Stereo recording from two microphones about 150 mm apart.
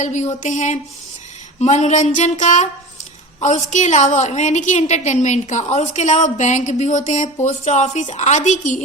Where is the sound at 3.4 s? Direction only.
50° left (ahead or behind).